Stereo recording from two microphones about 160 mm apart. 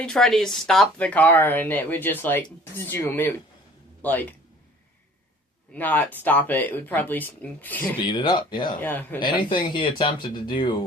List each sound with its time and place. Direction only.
0.0 s speech: 5° left (ahead or behind)
5.7 s speech: 10° left (ahead or behind)
8.0 s speech: 30° left (ahead or behind)
8.8 s speech: 10° left (ahead or behind)
9.2 s speech: 30° left (ahead or behind)